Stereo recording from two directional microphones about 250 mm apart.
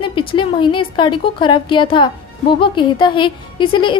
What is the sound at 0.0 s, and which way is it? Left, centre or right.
A woman's voice, left.